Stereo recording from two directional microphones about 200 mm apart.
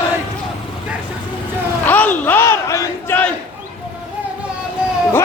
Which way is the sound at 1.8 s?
10° left (ahead or behind).